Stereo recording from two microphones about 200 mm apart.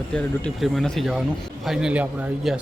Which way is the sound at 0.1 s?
5° left (ahead or behind).